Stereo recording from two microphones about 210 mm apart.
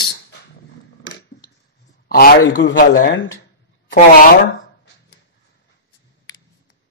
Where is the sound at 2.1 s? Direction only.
45° left (ahead or behind).